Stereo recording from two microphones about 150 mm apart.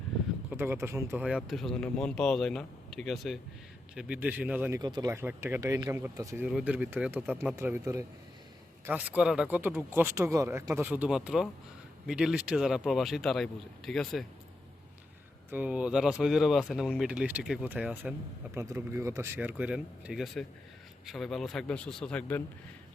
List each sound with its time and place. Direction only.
0.5 s speech: 15° right (ahead or behind)
1.2 s speech: 5° right (ahead or behind)
3.9 s speech: 10° right (ahead or behind)
4.8 s speech: 30° right (ahead or behind)
5.1 s speech: 15° right (ahead or behind)
6.4 s speech: 5° right (ahead or behind)
15.4 s speech: 10° right (ahead or behind); by 22.4 s 10° left (ahead or behind)